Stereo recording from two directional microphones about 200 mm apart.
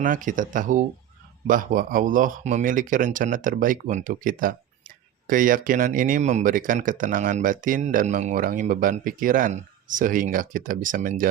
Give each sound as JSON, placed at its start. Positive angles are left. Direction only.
{"t": 0.0, "sound": "speech", "side_deg": -40}